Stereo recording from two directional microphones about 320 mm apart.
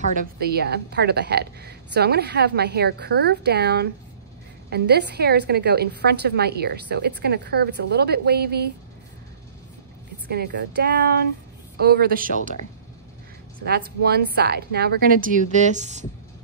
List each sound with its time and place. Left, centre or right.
0.1 s a woman's voice: right
10.3 s a woman's voice: right
13.7 s a woman's voice: right